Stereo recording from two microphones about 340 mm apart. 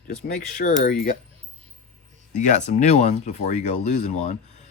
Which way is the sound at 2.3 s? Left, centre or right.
Left.